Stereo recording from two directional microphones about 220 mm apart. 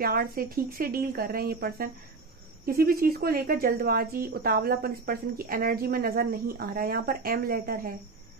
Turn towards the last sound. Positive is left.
turn(degrees=-40)  # may be behind; listen again after turning